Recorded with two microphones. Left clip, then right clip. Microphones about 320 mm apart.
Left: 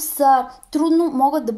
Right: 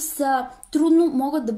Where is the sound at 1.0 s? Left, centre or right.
Left.